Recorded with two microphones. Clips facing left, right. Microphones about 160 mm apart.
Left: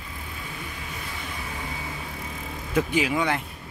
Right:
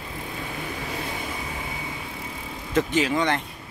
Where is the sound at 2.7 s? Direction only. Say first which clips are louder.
Right 1 dB; 10° left (ahead or behind).